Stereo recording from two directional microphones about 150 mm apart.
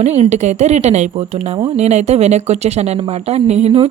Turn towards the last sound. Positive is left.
turn(degrees=-45)  # may be behind; listen again after turning